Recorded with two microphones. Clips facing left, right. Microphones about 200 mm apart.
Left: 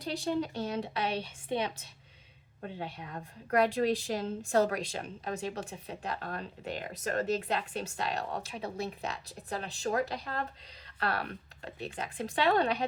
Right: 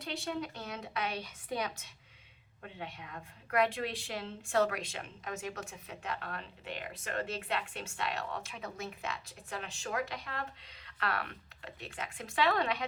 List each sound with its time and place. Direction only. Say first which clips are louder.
0.0 s a woman's voice: left 6 dB; 35° left (ahead or behind)